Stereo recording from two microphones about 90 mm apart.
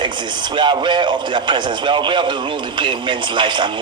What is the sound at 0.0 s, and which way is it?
A man's voice, 60° right (ahead or behind).